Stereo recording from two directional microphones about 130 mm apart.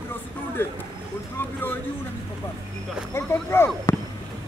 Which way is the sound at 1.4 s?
15° left (ahead or behind).